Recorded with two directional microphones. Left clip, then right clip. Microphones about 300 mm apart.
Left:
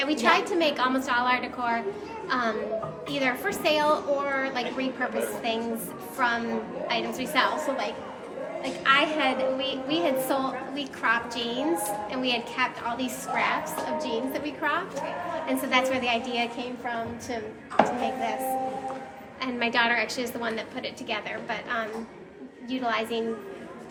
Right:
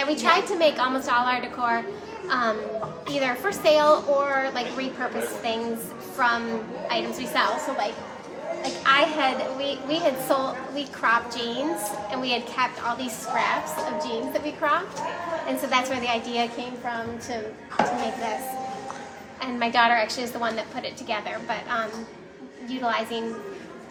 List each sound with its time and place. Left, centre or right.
0.0 s a woman's voice: centre
17.8 s speech: left
19.4 s a woman's voice: centre